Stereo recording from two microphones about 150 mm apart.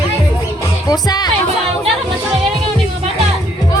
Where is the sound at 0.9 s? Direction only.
25° left (ahead or behind).